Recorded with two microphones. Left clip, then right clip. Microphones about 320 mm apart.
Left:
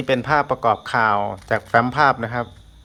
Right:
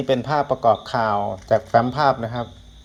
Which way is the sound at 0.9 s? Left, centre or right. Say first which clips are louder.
Left 3 dB; left.